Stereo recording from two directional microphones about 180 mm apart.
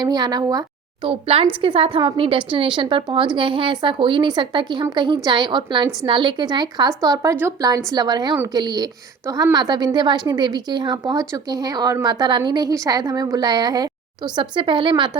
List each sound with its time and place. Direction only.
0.0 s a woman's voice: 20° right (ahead or behind)